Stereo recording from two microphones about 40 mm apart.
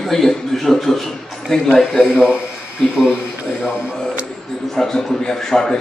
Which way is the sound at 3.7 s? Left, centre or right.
Right.